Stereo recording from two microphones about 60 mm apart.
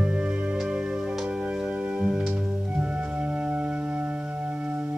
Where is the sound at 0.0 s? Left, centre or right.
Centre.